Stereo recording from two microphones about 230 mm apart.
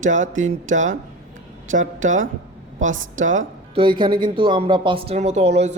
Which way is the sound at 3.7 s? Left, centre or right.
Right.